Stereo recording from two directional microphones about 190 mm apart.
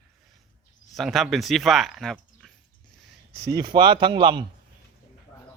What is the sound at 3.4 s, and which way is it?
Speech, 20° right (ahead or behind).